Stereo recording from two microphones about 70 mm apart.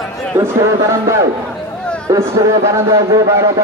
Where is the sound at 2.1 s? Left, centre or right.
Right.